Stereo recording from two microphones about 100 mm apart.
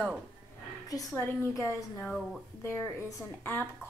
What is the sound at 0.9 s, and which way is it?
A woman's voice, 35° left (ahead or behind).